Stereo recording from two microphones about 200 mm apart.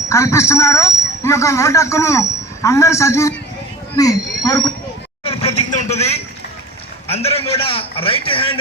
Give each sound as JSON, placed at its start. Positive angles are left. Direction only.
{"t": 0.1, "sound": "speech", "side_deg": 15}
{"t": 5.2, "sound": "a sound", "side_deg": 30}
{"t": 7.1, "sound": "a man's voice", "side_deg": 30}